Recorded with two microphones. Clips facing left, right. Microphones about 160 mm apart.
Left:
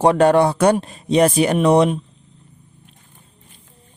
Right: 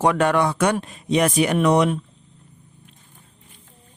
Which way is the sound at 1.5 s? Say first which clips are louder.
Left 3 dB; 30° left (ahead or behind).